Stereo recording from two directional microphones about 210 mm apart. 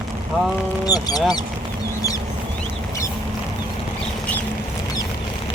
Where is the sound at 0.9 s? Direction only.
20° left (ahead or behind).